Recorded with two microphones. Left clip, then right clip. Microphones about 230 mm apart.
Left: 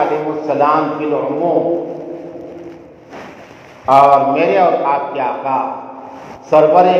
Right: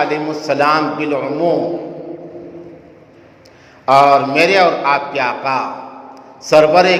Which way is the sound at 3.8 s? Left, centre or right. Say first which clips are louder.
Left 1 dB; right.